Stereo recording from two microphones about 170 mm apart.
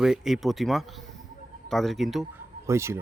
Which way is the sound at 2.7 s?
15° right (ahead or behind).